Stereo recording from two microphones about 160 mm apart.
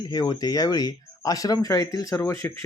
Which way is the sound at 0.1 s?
25° left (ahead or behind).